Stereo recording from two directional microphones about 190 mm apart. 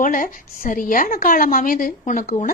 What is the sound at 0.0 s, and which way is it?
A woman's voice, 45° left (ahead or behind).